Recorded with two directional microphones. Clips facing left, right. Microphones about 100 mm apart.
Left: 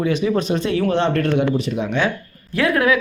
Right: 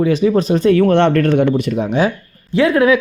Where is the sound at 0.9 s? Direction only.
55° right (ahead or behind).